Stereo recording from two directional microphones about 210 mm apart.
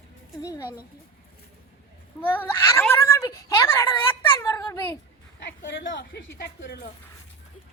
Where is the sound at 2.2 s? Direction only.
10° left (ahead or behind).